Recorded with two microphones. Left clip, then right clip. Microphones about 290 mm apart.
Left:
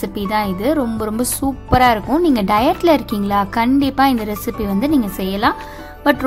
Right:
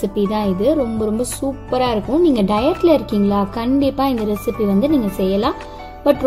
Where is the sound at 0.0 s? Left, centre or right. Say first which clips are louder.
Even; left.